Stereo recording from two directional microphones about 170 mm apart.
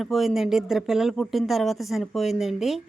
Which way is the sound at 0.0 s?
Centre (ahead or behind).